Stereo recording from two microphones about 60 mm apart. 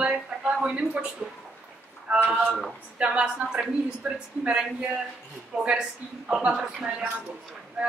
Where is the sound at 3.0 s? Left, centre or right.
Centre.